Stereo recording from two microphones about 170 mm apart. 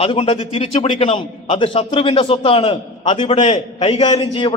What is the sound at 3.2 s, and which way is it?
Speech, 40° left (ahead or behind).